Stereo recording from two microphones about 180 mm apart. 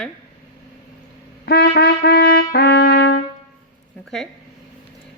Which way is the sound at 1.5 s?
60° left (ahead or behind).